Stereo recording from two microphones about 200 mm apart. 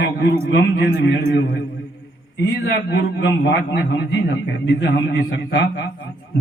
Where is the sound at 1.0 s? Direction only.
60° left (ahead or behind).